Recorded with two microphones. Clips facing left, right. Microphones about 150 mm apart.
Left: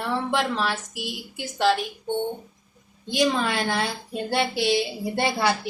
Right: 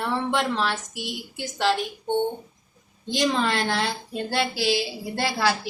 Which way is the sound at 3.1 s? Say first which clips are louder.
Even; 10° left (ahead or behind).